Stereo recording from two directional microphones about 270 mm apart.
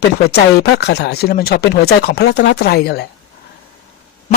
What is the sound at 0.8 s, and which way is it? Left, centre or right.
Speech, left.